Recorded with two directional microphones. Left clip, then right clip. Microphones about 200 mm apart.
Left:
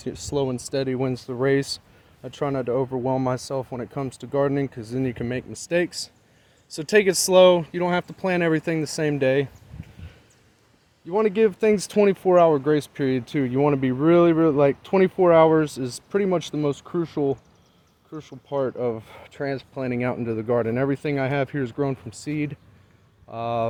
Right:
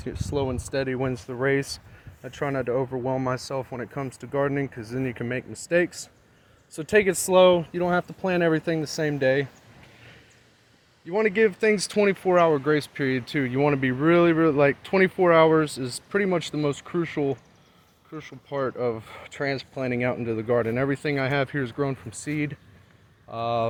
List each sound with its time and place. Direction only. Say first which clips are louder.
0.3 s speech: left 2 dB; 40° left (ahead or behind)
11.1 s speech: left 1 dB; 20° left (ahead or behind)